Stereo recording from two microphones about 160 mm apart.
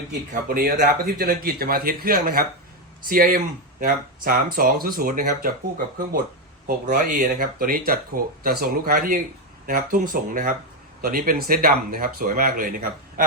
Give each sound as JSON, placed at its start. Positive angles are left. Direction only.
{"t": 0.4, "sound": "speech", "side_deg": -60}